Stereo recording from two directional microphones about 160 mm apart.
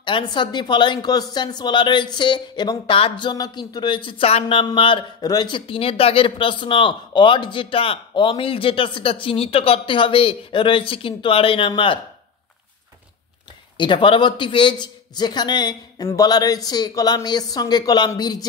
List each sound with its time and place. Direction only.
0.0 s speech: 30° left (ahead or behind)
13.7 s speech: 30° left (ahead or behind)